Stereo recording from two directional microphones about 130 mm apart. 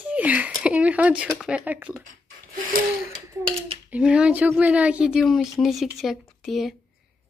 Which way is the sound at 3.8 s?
10° right (ahead or behind).